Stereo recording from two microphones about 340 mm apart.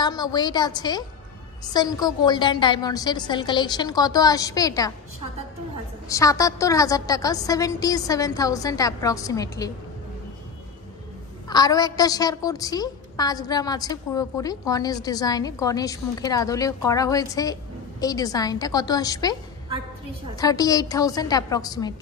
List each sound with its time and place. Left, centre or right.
0.0 s a woman's voice: centre
6.0 s a woman's voice: centre
11.4 s a woman's voice: centre
20.3 s a woman's voice: centre